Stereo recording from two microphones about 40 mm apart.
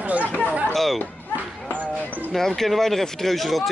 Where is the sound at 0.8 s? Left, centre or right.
Centre.